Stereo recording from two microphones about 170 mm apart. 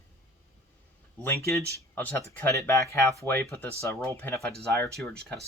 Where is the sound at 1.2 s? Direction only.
15° left (ahead or behind).